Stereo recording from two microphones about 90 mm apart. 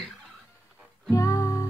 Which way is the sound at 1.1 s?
35° left (ahead or behind).